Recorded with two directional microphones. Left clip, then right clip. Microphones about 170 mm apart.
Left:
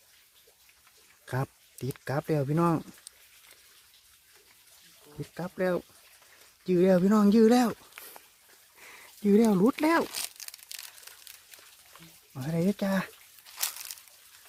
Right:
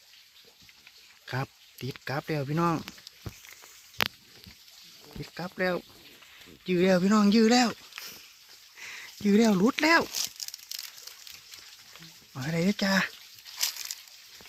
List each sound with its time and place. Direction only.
1.2 s a sound: 10° left (ahead or behind)
2.2 s speech: 5° left (ahead or behind)
5.5 s speech: 5° left (ahead or behind)
7.1 s speech: 25° left (ahead or behind)
8.9 s a sound: 15° left (ahead or behind)
9.5 s speech: 5° left (ahead or behind)
9.7 s speech: 15° left (ahead or behind)
10.0 s crumpling: centre (ahead or behind)
12.4 s speech: 5° left (ahead or behind)
13.6 s a sound: 15° left (ahead or behind)